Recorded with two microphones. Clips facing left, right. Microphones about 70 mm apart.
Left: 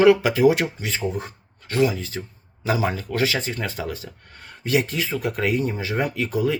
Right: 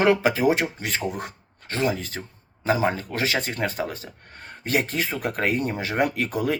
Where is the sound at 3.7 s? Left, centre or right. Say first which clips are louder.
Right 1 dB; right.